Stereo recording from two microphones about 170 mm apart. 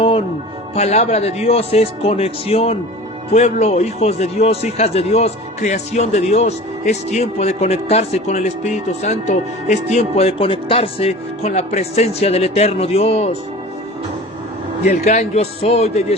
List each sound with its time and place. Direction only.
0.8 s a man's voice: 40° left (ahead or behind)
14.8 s a man's voice: 40° left (ahead or behind)